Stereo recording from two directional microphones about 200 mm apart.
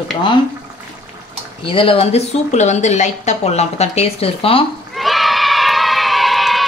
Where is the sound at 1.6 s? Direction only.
25° left (ahead or behind).